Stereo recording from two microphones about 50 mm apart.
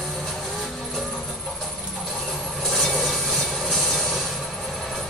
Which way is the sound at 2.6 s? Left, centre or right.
Centre.